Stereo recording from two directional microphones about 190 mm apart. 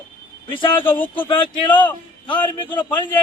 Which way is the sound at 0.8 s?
10° left (ahead or behind).